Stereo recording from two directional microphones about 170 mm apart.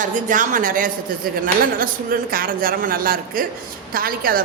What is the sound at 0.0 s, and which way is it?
A woman's voice, 50° right (ahead or behind).